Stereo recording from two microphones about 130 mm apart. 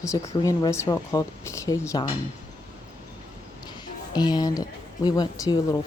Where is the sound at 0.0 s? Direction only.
25° left (ahead or behind).